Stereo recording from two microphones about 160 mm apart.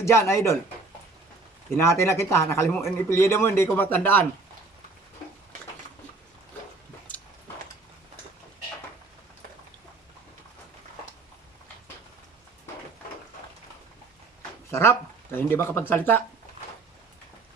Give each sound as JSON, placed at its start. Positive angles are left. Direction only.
{"t": 0.0, "sound": "speech", "side_deg": 15}
{"t": 1.7, "sound": "speech", "side_deg": 15}
{"t": 14.7, "sound": "speech", "side_deg": 15}